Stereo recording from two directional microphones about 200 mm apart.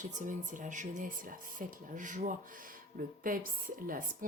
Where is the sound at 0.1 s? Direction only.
40° right (ahead or behind).